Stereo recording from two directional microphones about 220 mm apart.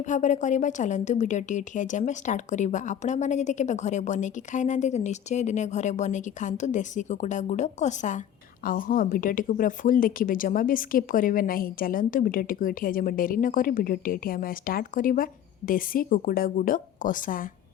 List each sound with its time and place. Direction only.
0.0 s a woman's voice: 35° left (ahead or behind)